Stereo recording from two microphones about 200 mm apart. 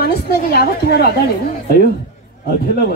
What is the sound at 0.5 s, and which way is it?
Speech, 55° left (ahead or behind).